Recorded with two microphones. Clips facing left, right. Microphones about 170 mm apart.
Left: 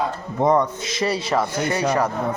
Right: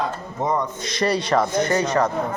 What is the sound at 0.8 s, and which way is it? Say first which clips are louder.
Speech: right 1 dB; 5° left (ahead or behind).